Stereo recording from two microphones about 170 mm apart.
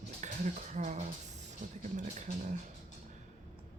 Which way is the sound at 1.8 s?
45° right (ahead or behind).